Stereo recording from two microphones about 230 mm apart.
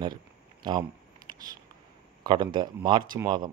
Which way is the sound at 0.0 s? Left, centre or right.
Centre.